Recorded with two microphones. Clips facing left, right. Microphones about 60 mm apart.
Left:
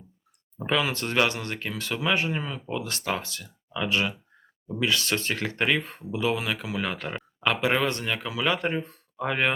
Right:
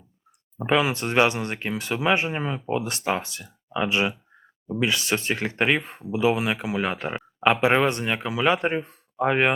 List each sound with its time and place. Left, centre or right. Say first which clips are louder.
0.6 s speech: right 4 dB; centre